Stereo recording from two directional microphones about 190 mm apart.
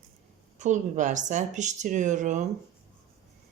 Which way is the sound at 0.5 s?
40° right (ahead or behind).